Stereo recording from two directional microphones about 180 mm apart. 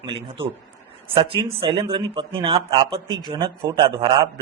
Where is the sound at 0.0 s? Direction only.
30° right (ahead or behind).